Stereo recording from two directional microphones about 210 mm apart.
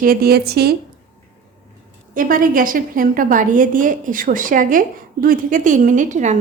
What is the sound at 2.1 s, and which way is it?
A woman's voice, 40° right (ahead or behind).